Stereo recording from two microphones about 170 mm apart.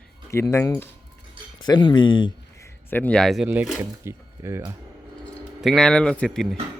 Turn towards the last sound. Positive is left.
turn(degrees=5)  # may be behind; listen again after turning